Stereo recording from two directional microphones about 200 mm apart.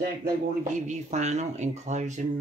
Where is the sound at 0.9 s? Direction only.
35° right (ahead or behind).